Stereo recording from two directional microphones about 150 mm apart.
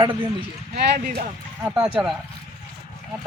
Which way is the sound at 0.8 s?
85° right.